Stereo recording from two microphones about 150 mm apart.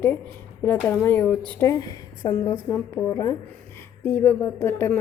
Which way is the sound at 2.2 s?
25° left (ahead or behind).